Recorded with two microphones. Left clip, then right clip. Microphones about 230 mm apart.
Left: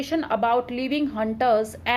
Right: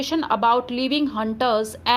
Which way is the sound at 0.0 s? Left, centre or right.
Centre.